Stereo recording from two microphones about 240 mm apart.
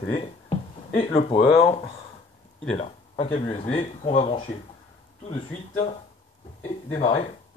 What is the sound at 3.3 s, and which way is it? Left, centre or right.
Speech, left.